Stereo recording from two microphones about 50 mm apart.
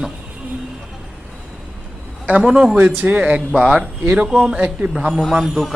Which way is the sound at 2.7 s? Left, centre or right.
Right.